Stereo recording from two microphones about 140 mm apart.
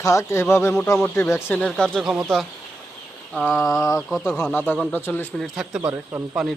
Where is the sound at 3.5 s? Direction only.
25° left (ahead or behind).